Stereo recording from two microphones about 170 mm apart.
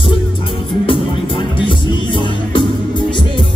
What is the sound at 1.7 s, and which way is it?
Music, 30° left (ahead or behind).